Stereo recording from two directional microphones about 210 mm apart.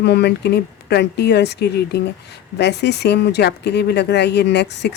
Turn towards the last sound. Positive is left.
turn(degrees=55)  # may be behind; listen again after turning